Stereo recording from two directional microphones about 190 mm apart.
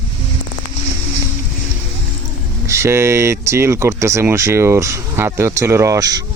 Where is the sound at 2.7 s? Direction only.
15° right (ahead or behind).